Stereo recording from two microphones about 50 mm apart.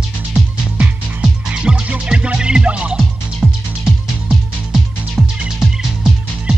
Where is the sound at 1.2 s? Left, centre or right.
Centre.